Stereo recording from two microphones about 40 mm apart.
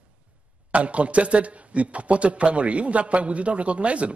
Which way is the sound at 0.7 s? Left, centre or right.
Right.